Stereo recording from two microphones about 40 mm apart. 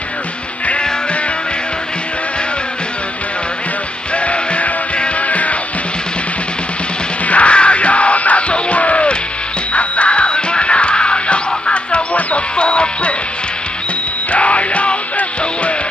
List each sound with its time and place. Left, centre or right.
4.1 s music: left
7.2 s music: left
14.3 s music: left